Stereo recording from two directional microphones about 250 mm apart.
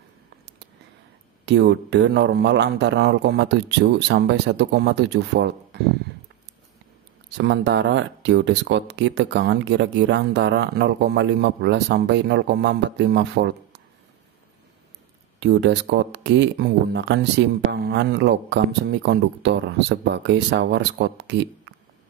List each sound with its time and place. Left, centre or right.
1.4 s speech: right
7.2 s speech: right
15.4 s speech: right